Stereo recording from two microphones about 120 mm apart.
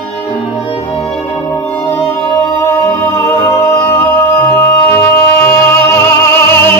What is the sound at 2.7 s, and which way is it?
Music, 15° left (ahead or behind).